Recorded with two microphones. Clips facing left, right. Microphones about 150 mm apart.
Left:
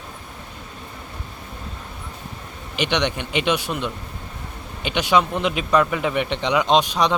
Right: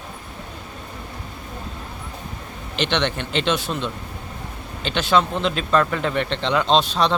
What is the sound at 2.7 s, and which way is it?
A man's voice, 10° left (ahead or behind).